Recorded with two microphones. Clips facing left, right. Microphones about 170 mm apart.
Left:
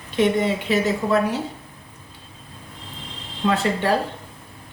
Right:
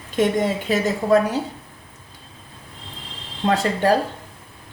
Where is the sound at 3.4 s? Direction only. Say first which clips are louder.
Right 1 dB; 40° right (ahead or behind).